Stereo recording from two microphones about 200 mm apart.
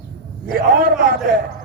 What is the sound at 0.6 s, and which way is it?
Speech, 45° right (ahead or behind).